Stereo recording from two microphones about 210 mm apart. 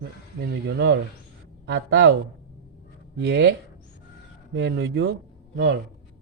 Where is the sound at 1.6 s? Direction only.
55° right (ahead or behind).